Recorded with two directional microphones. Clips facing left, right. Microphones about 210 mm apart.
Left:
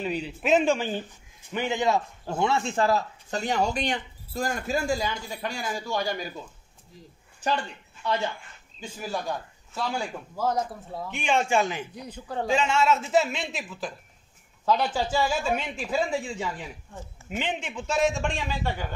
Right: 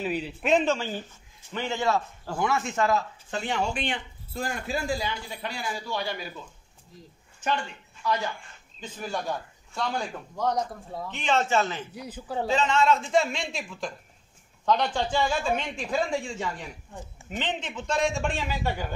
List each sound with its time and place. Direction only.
0.0 s a man's voice: centre (ahead or behind); by 6.2 s 45° left (ahead or behind)
7.4 s speech: 35° left (ahead or behind)
8.8 s a man's voice: 5° left (ahead or behind)
11.9 s a man's voice: 5° right (ahead or behind)
12.4 s a man's voice: 10° left (ahead or behind); by 18.9 s 10° right (ahead or behind)